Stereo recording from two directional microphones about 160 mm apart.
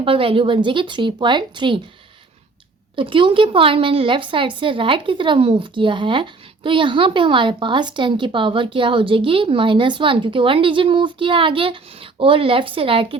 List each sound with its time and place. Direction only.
0.0 s a woman's voice: 35° right (ahead or behind)
2.9 s a woman's voice: 30° right (ahead or behind)